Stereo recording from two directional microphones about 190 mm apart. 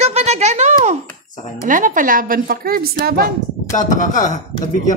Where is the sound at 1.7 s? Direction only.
45° right (ahead or behind).